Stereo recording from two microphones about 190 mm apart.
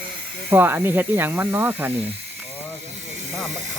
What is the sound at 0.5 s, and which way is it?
Speech, 10° right (ahead or behind).